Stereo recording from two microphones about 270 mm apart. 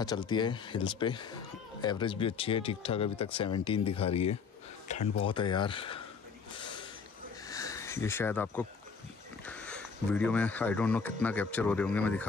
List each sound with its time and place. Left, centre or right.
0.0 s speech: centre
4.8 s a sound: left
5.2 s speech: centre
6.6 s snort: centre
7.4 s a sound: centre
9.5 s speech: centre